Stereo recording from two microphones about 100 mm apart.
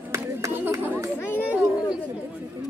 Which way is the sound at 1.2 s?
20° left (ahead or behind).